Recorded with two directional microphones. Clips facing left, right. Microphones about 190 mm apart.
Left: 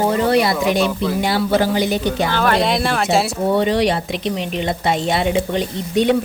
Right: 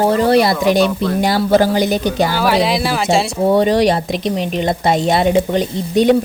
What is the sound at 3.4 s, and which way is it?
A woman's voice, 40° right (ahead or behind).